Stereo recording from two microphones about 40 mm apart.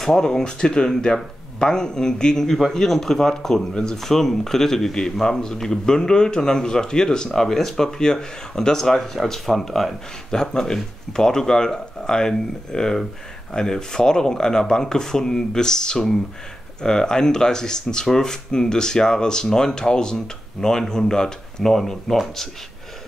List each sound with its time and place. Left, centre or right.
0.0 s speech: centre
2.5 s speech: centre